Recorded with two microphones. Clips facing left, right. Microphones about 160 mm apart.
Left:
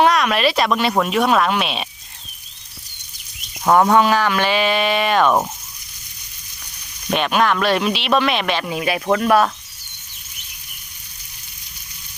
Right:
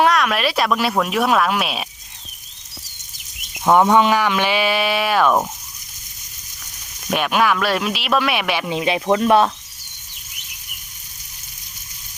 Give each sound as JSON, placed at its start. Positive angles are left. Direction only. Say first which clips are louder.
{"t": 0.0, "sound": "speech", "louder": "left 1 dB", "side_deg": 0}
{"t": 3.6, "sound": "speech", "louder": "even", "side_deg": -5}
{"t": 3.8, "sound": "speech", "louder": "even", "side_deg": -15}
{"t": 7.1, "sound": "speech", "louder": "even", "side_deg": -5}
{"t": 8.7, "sound": "speech", "louder": "right 2 dB", "side_deg": -25}